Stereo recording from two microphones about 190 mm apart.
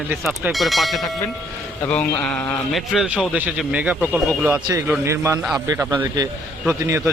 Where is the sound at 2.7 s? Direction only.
5° right (ahead or behind).